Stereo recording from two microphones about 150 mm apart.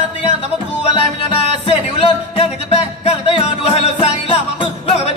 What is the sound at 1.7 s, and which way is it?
Music, 40° left (ahead or behind).